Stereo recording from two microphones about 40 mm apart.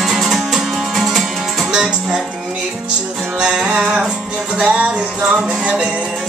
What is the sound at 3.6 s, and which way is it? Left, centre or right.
Music, centre.